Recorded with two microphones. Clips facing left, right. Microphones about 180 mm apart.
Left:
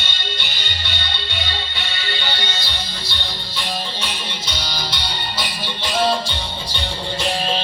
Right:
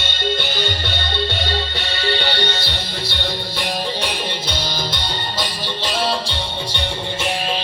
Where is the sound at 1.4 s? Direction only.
40° right (ahead or behind).